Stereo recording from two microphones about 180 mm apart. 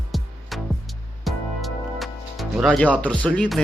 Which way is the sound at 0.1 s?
Centre (ahead or behind).